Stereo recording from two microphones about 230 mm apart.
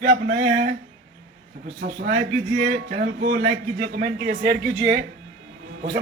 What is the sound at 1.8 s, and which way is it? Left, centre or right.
Speech, right.